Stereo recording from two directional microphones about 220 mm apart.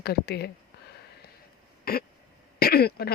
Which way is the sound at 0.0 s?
45° left (ahead or behind).